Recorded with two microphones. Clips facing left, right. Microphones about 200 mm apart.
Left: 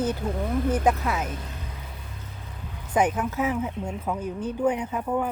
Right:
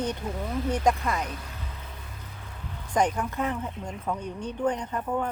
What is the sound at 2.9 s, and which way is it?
Speech, 5° left (ahead or behind).